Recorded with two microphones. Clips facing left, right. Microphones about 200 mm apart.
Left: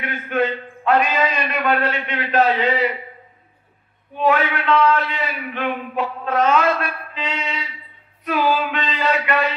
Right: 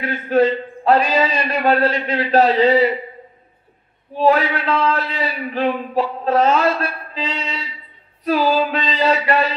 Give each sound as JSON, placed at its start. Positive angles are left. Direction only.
{"t": 0.0, "sound": "a man's voice", "side_deg": -35}
{"t": 4.1, "sound": "a man's voice", "side_deg": -35}